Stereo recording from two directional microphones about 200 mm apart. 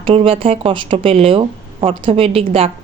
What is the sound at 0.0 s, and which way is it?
Speech, 30° right (ahead or behind).